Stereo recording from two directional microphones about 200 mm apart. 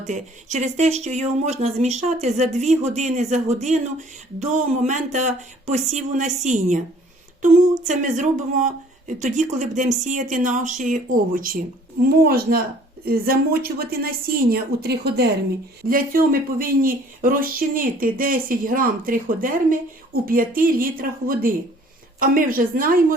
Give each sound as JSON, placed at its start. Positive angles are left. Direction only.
{"t": 0.0, "sound": "speech", "side_deg": -35}